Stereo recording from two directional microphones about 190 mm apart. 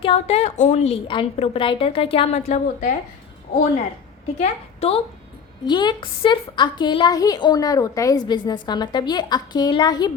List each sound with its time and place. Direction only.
0.0 s a woman's voice: 30° left (ahead or behind)
4.4 s a woman's voice: 30° left (ahead or behind)